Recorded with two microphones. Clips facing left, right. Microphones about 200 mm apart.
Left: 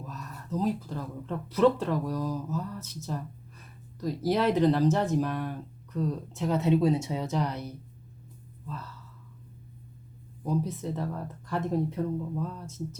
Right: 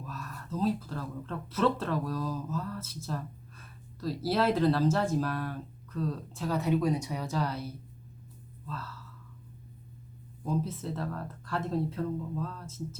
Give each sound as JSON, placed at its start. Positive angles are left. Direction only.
{"t": 0.0, "sound": "speech", "side_deg": 20}
{"t": 10.4, "sound": "speech", "side_deg": 15}